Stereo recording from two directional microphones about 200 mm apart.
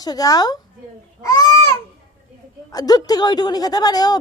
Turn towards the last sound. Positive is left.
turn(degrees=20)  # may be behind; listen again after turning